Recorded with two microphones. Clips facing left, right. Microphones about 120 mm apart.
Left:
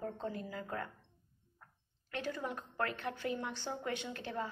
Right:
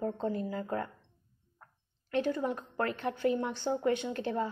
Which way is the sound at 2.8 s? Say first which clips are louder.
Right 8 dB; 35° right (ahead or behind).